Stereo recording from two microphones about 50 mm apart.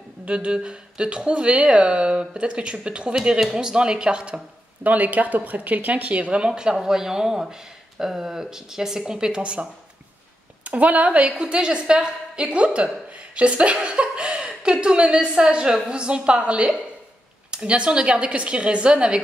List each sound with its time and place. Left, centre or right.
0.2 s speech: right
4.8 s a woman's voice: right